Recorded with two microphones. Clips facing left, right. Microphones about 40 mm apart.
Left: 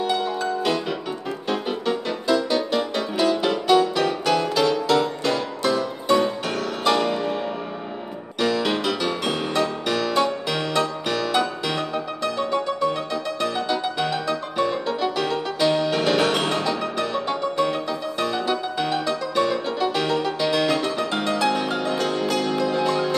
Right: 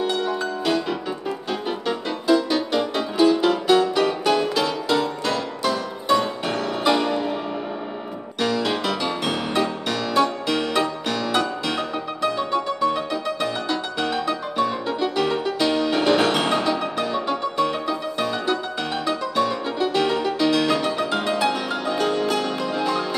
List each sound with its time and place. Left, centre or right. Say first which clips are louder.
0.0 s music: even; centre
1.5 s music: left 3 dB; centre
8.4 s music: left 1 dB; centre
9.3 s music: right 1 dB; centre
9.8 s music: even; centre